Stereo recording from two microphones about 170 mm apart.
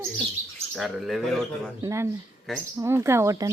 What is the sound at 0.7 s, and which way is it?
Speech, centre (ahead or behind).